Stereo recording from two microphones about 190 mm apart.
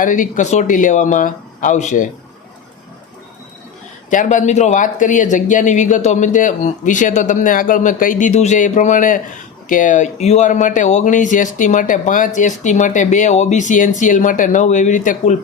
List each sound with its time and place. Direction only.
0.0 s speech: 45° left (ahead or behind)
4.1 s speech: 45° left (ahead or behind)